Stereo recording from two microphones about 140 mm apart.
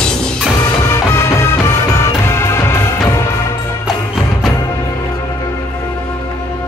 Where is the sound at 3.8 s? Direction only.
Centre (ahead or behind).